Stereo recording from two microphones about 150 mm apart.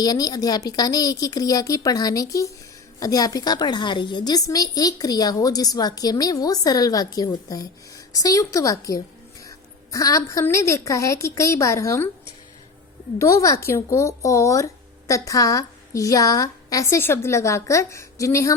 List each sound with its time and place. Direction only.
0.0 s a woman's voice: 25° left (ahead or behind)
13.1 s a woman's voice: 20° left (ahead or behind)